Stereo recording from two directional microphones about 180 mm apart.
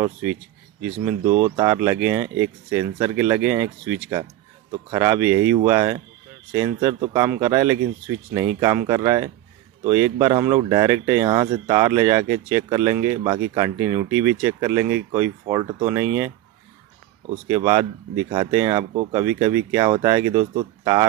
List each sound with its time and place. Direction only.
0.0 s speech: 10° right (ahead or behind)
17.5 s speech: 20° right (ahead or behind)